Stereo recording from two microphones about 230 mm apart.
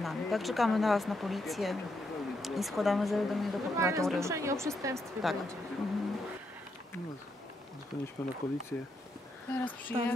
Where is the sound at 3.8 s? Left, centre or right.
Centre.